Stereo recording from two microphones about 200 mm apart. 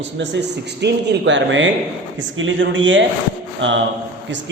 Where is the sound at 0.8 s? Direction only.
60° right (ahead or behind).